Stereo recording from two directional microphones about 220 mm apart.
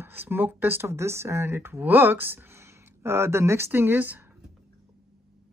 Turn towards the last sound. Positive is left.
turn(degrees=-10)  # may be behind; listen again after turning